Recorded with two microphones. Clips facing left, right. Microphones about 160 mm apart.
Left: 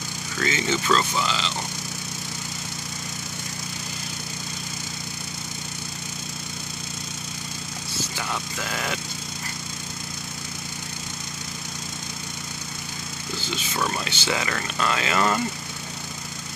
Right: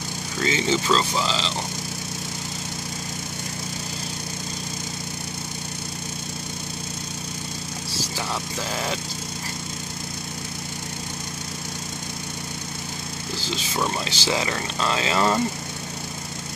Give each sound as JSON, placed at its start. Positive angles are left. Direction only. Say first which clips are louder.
{"t": 0.4, "sound": "speech", "louder": "right 2 dB", "side_deg": -30}
{"t": 8.5, "sound": "speech", "louder": "right 2 dB", "side_deg": -30}
{"t": 13.7, "sound": "speech", "louder": "right 1 dB", "side_deg": -20}
{"t": 14.0, "sound": "speech", "louder": "right 2 dB", "side_deg": -30}